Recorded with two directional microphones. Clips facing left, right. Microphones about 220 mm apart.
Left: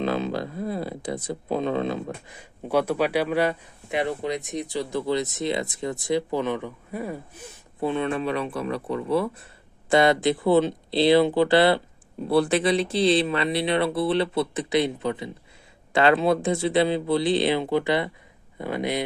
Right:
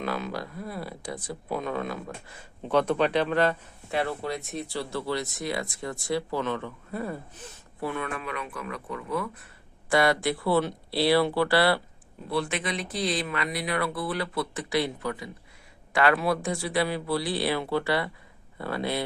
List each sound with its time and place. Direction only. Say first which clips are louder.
0.0 s speech: left 6 dB; 25° left (ahead or behind)
2.3 s speech: left 1 dB; 10° left (ahead or behind)
7.8 s speech: left 7 dB; 25° left (ahead or behind)
12.3 s speech: left 9 dB; 35° left (ahead or behind); by 19.0 s 20° left (ahead or behind)